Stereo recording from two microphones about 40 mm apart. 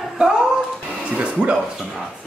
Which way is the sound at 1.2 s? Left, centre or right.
Right.